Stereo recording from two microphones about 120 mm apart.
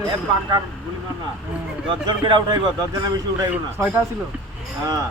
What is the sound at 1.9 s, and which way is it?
Speech, 40° right (ahead or behind).